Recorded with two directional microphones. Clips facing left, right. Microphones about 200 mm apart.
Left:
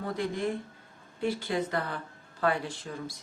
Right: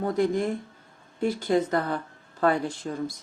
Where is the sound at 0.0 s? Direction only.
45° right (ahead or behind).